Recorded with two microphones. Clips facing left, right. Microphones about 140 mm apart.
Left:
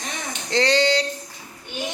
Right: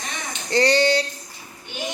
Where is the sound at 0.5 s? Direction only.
10° right (ahead or behind).